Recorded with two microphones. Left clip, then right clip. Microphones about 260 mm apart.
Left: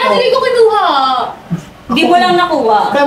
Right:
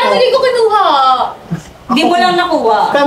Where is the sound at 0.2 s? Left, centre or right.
Centre.